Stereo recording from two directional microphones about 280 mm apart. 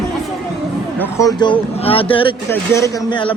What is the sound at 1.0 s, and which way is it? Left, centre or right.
Speech, centre.